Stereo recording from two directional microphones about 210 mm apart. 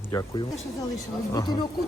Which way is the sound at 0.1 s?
15° left (ahead or behind).